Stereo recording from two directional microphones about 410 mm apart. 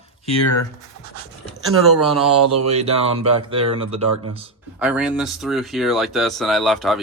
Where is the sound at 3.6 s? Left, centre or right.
Right.